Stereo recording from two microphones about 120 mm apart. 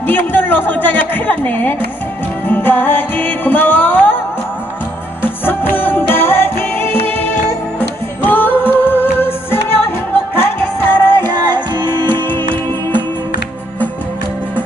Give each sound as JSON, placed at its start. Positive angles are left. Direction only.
{"t": 0.0, "sound": "a woman's voice", "side_deg": 15}
{"t": 2.4, "sound": "music", "side_deg": 15}
{"t": 5.2, "sound": "music", "side_deg": 15}